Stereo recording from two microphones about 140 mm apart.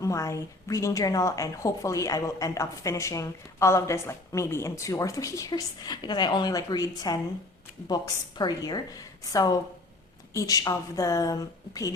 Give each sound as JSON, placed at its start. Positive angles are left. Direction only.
{"t": 0.0, "sound": "a woman's voice", "side_deg": 20}